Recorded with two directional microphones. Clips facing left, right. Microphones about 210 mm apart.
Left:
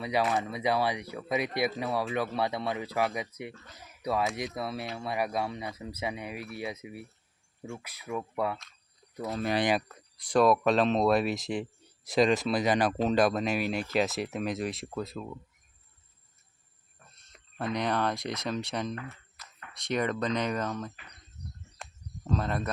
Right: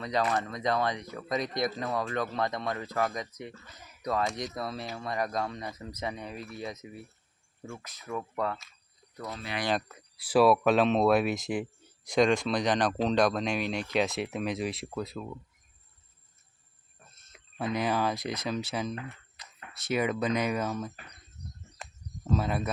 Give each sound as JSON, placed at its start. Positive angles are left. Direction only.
{"t": 0.0, "sound": "speech", "side_deg": 5}
{"t": 9.3, "sound": "speech", "side_deg": 40}
{"t": 9.9, "sound": "speech", "side_deg": -5}
{"t": 17.2, "sound": "speech", "side_deg": 0}
{"t": 18.9, "sound": "a sound", "side_deg": -20}
{"t": 19.7, "sound": "speech", "side_deg": -5}
{"t": 21.8, "sound": "a sound", "side_deg": -5}